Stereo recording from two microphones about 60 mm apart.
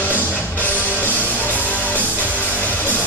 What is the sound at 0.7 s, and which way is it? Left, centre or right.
Music, right.